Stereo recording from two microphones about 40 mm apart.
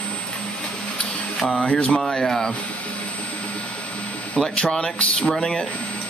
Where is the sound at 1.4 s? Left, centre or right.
Left.